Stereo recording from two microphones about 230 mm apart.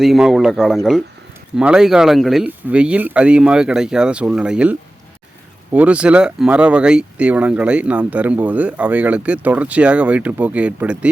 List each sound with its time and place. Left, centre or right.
0.0 s speech: centre